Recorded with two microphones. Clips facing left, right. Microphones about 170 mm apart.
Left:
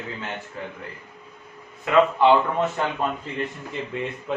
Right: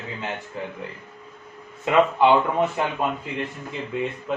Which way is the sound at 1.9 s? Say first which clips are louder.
Even; 25° right (ahead or behind).